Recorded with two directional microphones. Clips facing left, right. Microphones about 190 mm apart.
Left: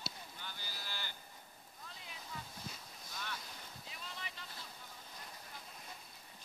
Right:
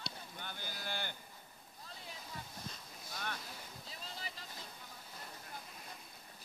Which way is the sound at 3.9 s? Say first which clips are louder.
Right 1 dB; 35° right (ahead or behind).